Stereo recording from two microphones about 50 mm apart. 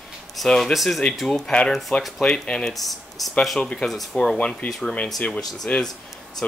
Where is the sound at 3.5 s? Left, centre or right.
Centre.